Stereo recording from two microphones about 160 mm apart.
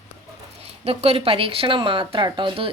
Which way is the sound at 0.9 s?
35° right (ahead or behind).